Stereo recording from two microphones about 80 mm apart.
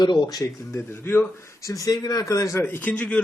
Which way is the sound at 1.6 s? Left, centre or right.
Left.